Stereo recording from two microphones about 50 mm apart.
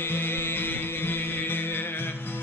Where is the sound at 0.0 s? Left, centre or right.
Left.